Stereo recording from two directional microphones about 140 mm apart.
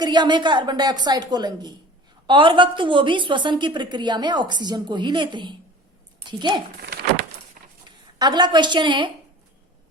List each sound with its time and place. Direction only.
0.0 s a woman's voice: 35° right (ahead or behind)
7.6 s a sound: 65° right (ahead or behind)
8.2 s a woman's voice: 30° right (ahead or behind)